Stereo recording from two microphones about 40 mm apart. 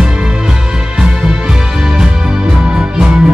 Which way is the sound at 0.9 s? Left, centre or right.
Right.